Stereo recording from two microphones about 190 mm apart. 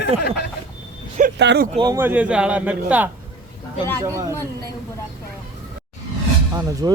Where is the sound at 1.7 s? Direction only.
20° right (ahead or behind).